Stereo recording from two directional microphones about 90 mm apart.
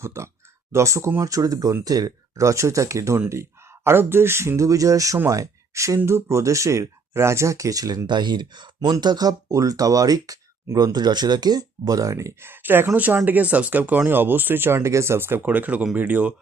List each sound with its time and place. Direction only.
0.0 s speech: 30° right (ahead or behind)